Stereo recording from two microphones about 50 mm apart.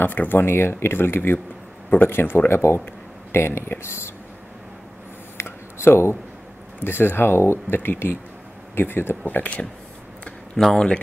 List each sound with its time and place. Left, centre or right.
0.0 s speech: left
3.8 s speech: left
5.4 s a sound: left
6.8 s speech: left
9.2 s speech: left
10.6 s speech: centre